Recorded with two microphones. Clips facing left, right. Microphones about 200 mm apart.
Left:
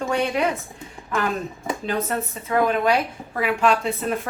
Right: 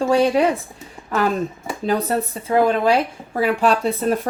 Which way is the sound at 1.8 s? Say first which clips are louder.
Right 7 dB; 35° right (ahead or behind).